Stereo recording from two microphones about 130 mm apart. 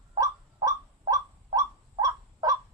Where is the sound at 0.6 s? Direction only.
25° right (ahead or behind).